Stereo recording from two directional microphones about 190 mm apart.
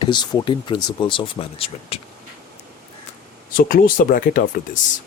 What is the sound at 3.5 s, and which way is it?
Speech, 50° left (ahead or behind).